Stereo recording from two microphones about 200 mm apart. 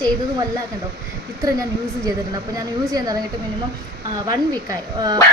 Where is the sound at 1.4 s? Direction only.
15° right (ahead or behind).